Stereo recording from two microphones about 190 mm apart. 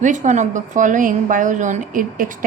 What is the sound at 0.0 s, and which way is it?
A woman's voice, 40° right (ahead or behind).